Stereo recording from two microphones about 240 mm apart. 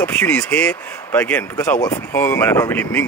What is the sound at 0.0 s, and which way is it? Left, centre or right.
Speech, centre.